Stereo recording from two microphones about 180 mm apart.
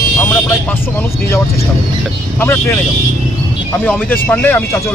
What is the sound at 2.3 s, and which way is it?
Speech, 10° left (ahead or behind).